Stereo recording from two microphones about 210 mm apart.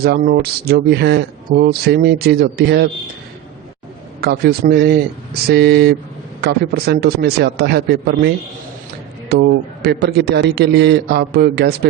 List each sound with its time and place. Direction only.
0.0 s speech: 50° right (ahead or behind)
4.2 s speech: 50° right (ahead or behind)
9.3 s speech: 50° right (ahead or behind)